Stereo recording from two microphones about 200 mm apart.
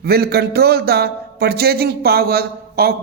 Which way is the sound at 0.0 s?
55° right (ahead or behind).